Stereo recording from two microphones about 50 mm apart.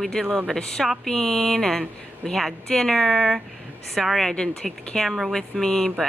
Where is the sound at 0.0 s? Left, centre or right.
Centre.